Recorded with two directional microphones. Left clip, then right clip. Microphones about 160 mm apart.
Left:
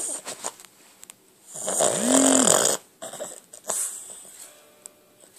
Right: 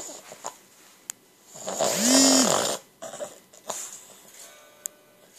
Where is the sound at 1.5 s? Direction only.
20° left (ahead or behind).